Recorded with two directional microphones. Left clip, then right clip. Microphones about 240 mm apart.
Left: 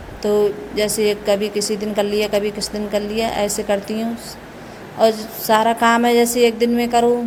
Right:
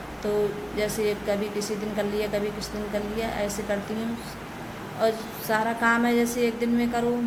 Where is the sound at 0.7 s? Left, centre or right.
Left.